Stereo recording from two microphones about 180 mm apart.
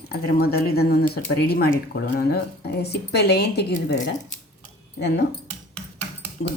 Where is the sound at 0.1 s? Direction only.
60° left (ahead or behind).